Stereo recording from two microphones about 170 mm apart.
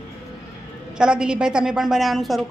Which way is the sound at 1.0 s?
5° right (ahead or behind).